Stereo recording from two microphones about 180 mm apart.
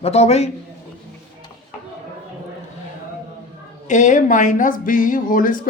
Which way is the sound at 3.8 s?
45° left (ahead or behind).